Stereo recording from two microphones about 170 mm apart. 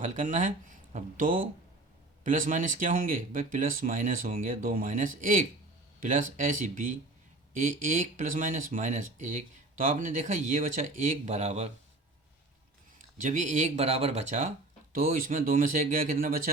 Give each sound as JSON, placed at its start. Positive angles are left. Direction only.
{"t": 0.0, "sound": "speech", "side_deg": -45}
{"t": 13.0, "sound": "speech", "side_deg": -50}